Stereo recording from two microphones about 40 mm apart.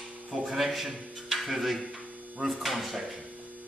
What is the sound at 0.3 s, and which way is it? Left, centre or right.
A man's voice, centre.